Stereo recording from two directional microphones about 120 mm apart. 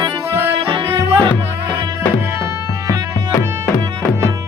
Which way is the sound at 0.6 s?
50° right (ahead or behind).